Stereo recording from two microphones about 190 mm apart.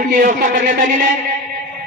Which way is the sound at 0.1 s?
45° right (ahead or behind).